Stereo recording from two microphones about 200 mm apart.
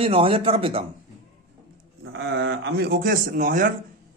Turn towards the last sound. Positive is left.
turn(degrees=-40)  # may be behind; listen again after turning